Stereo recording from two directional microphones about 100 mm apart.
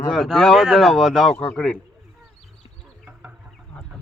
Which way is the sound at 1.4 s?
15° left (ahead or behind).